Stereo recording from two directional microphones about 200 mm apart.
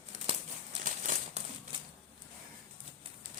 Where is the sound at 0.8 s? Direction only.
40° right (ahead or behind).